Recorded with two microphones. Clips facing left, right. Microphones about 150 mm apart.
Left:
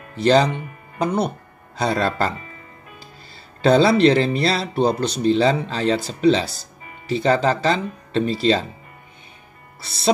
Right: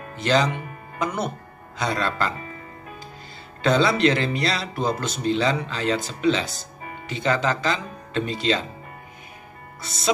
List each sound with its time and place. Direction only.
0.1 s speech: 35° left (ahead or behind)
3.6 s speech: 35° left (ahead or behind)
9.8 s speech: 35° left (ahead or behind)